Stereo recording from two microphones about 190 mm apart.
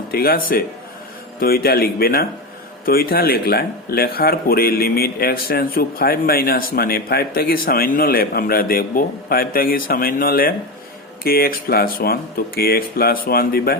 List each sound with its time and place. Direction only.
0.1 s speech: 50° left (ahead or behind)